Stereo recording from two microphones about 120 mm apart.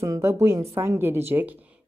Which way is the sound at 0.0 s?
25° right (ahead or behind).